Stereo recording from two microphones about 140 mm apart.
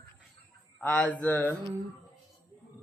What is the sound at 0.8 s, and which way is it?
Speech, 10° left (ahead or behind).